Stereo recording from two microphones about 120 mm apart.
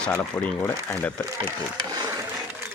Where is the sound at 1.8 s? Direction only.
30° right (ahead or behind).